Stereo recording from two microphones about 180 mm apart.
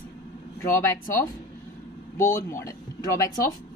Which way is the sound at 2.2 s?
15° left (ahead or behind).